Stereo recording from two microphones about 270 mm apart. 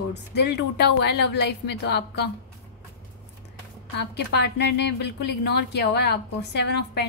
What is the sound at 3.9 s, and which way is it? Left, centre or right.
A woman's voice, left.